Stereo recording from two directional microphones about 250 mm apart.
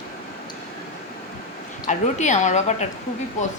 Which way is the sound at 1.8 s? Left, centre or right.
Left.